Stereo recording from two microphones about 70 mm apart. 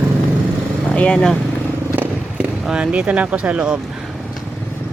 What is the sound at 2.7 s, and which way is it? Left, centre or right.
Speech, centre.